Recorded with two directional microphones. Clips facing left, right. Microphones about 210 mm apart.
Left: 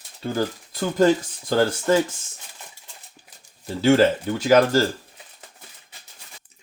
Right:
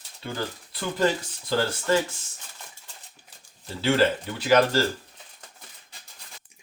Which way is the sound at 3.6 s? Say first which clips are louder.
Left 6 dB; 45° left (ahead or behind).